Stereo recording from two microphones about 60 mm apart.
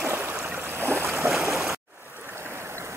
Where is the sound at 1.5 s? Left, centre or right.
Centre.